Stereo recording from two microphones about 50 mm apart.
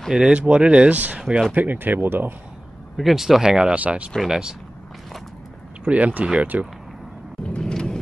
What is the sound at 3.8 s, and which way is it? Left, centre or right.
Speech, right.